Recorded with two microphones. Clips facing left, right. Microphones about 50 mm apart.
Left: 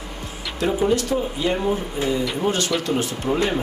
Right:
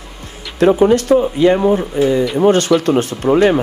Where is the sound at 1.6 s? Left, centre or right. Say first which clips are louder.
Right 9 dB; right.